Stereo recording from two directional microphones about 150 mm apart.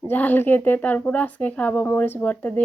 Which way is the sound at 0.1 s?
10° left (ahead or behind).